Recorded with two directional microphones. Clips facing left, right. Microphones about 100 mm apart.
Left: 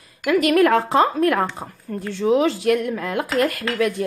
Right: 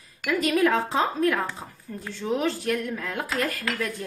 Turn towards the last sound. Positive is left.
turn(degrees=75)  # may be behind; listen again after turning